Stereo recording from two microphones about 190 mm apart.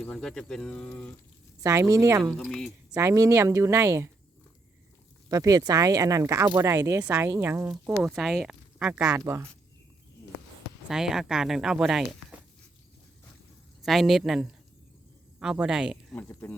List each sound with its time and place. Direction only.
0.0 s speech: 5° left (ahead or behind)
1.6 s speech: 15° right (ahead or behind)
2.4 s speech: centre (ahead or behind)
2.9 s speech: 15° right (ahead or behind)
5.3 s speech: 20° right (ahead or behind)
10.8 s speech: 5° right (ahead or behind)
13.8 s speech: centre (ahead or behind)
16.1 s speech: 10° left (ahead or behind)